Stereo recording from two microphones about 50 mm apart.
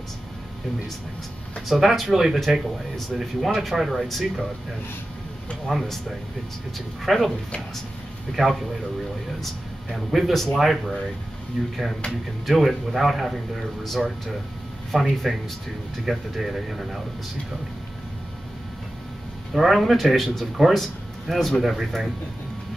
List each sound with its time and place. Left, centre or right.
1.7 s speech: centre
5.7 s speech: centre
7.1 s speech: centre
8.4 s speech: centre
9.9 s speech: centre
14.9 s speech: centre
19.5 s speech: centre